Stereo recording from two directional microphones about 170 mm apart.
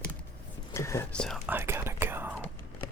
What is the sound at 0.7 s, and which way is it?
Whispering, 15° left (ahead or behind).